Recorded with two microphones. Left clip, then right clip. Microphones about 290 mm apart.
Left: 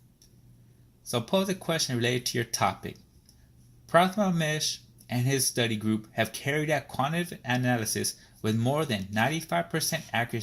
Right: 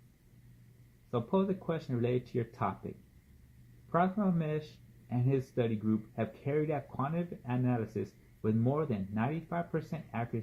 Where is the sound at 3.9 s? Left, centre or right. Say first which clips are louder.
Left 8 dB; left.